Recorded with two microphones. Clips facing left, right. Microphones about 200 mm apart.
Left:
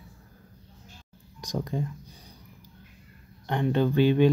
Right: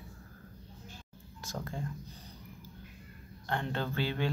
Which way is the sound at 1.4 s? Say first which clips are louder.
Left 9 dB; 15° left (ahead or behind).